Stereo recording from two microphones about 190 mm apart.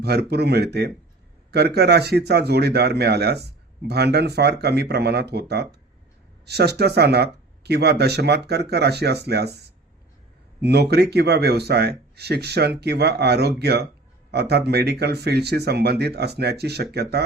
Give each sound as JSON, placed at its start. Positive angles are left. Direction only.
{"t": 0.0, "sound": "speech", "side_deg": -60}
{"t": 10.6, "sound": "speech", "side_deg": -60}